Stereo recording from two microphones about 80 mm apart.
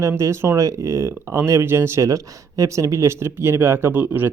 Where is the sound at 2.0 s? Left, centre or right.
Right.